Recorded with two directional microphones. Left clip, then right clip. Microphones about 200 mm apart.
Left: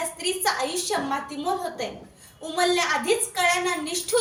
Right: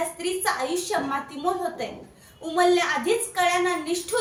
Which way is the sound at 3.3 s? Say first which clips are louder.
Right 2 dB; 15° right (ahead or behind).